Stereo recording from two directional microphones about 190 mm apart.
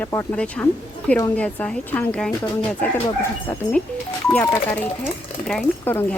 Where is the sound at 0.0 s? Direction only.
10° left (ahead or behind).